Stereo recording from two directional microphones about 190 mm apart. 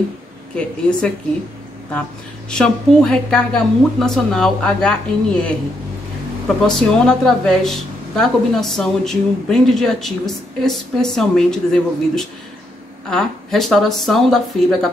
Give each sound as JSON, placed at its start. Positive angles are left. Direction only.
{"t": 0.6, "sound": "a woman's voice", "side_deg": 5}
{"t": 2.5, "sound": "a woman's voice", "side_deg": 5}
{"t": 6.7, "sound": "a woman's voice", "side_deg": 5}